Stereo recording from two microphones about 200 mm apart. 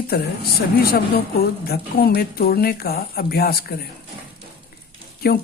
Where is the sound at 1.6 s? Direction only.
50° left (ahead or behind).